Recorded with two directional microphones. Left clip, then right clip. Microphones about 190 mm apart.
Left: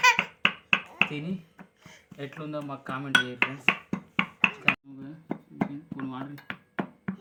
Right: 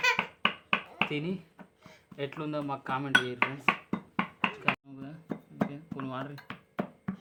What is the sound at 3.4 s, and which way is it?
Music, 40° left (ahead or behind).